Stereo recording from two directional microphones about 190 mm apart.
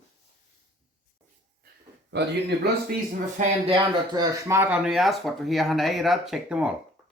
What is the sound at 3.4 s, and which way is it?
Speech, 30° right (ahead or behind).